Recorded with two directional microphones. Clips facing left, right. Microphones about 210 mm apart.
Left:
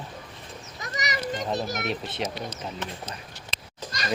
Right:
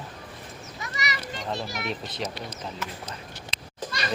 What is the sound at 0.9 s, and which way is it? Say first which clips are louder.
Children playing: left 6 dB; 45° left (ahead or behind).